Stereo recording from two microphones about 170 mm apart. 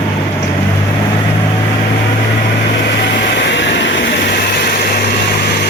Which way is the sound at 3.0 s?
90° left.